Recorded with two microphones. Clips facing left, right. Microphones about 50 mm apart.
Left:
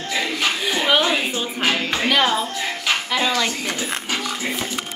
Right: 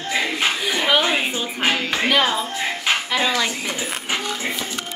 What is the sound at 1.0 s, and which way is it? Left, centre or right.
Music, right.